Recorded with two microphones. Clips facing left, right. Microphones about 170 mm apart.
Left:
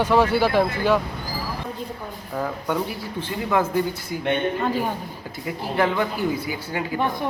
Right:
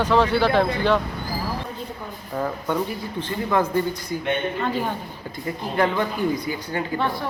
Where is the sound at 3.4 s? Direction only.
10° left (ahead or behind).